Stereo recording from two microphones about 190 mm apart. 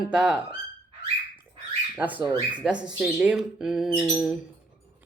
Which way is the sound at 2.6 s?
5° right (ahead or behind).